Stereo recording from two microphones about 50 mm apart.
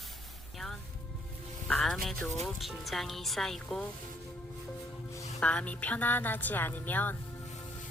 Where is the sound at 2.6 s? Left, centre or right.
Centre.